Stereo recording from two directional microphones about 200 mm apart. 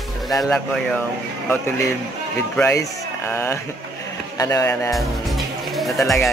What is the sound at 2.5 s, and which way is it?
Speech, 15° left (ahead or behind).